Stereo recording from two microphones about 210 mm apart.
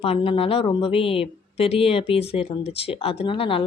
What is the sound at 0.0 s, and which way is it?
A woman's voice, 25° left (ahead or behind).